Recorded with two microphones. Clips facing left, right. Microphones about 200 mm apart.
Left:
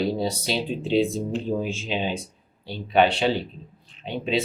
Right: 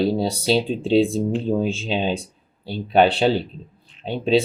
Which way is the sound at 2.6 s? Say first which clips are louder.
Right 3 dB; 35° right (ahead or behind).